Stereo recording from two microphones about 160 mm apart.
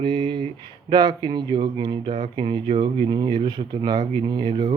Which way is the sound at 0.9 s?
25° right (ahead or behind).